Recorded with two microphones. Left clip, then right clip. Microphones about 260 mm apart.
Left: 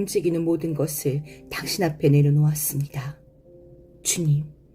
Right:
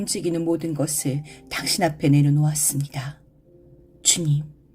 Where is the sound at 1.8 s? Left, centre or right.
Right.